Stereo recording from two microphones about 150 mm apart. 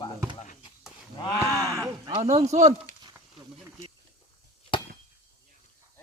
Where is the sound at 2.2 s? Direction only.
45° right (ahead or behind).